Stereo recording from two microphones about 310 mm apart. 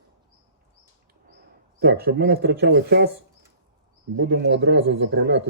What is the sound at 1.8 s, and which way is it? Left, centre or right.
Speech, right.